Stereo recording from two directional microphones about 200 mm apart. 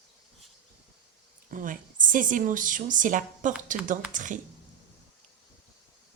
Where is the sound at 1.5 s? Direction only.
40° right (ahead or behind).